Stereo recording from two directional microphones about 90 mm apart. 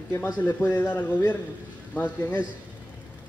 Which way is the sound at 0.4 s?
25° left (ahead or behind).